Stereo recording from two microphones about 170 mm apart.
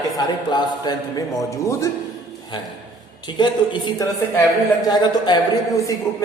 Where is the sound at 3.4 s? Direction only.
25° left (ahead or behind).